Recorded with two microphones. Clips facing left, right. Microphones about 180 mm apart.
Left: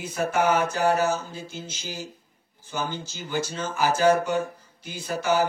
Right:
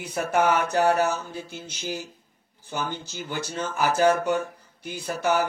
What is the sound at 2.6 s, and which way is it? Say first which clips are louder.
Speech: even; 60° right (ahead or behind).